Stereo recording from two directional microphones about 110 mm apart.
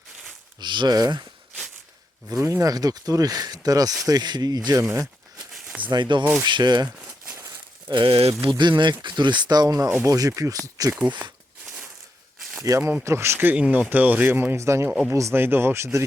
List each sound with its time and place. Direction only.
0.6 s speech: 45° right (ahead or behind)
2.4 s speech: 30° right (ahead or behind)
4.8 s speech: 25° right (ahead or behind)
5.6 s a sound: 15° right (ahead or behind)
5.9 s speech: 40° right (ahead or behind)
7.9 s speech: 45° right (ahead or behind)
8.4 s speech: 45° right (ahead or behind)
12.7 s speech: 35° right (ahead or behind)